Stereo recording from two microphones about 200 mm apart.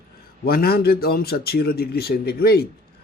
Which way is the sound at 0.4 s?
50° left (ahead or behind).